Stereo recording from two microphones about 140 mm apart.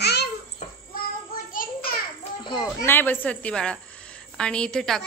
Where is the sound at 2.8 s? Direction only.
15° left (ahead or behind).